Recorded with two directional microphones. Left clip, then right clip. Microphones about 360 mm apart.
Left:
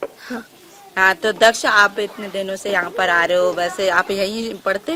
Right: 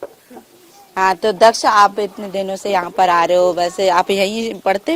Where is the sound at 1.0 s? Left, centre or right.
Right.